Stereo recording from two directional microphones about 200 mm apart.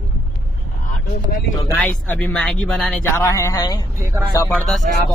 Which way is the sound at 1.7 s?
10° left (ahead or behind).